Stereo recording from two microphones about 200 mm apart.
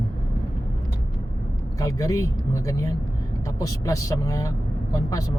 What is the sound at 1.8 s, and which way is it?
Speech, 15° left (ahead or behind).